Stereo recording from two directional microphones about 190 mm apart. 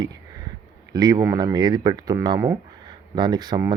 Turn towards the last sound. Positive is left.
turn(degrees=-20)  # may be behind; listen again after turning